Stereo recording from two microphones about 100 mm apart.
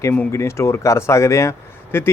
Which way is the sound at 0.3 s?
25° left (ahead or behind).